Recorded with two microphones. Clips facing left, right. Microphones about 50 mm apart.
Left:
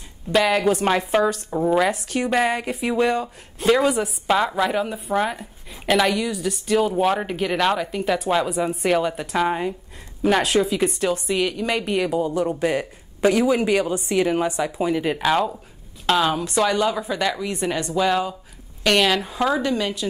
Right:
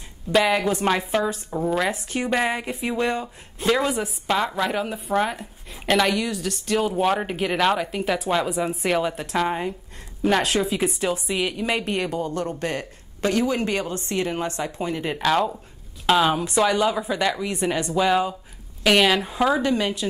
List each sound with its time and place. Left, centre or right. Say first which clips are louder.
0.3 s a woman's voice: left 1 dB; centre
19.6 s speech: right 1 dB; right